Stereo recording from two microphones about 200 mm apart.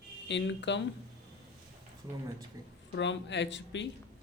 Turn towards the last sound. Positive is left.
turn(degrees=65)  # may be behind; listen again after turning